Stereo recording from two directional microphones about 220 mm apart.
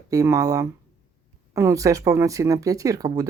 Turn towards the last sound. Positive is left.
turn(degrees=-15)  # may be behind; listen again after turning